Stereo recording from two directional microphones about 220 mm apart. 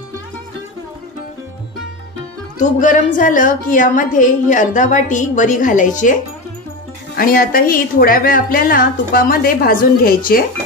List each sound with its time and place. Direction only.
2.6 s a woman's voice: 35° left (ahead or behind)
7.2 s a woman's voice: 40° left (ahead or behind)